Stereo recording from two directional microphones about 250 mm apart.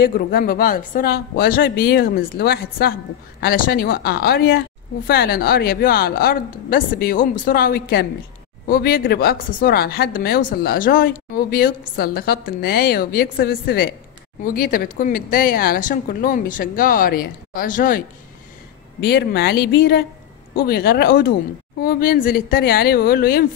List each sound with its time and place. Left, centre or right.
0.0 s a woman's voice: left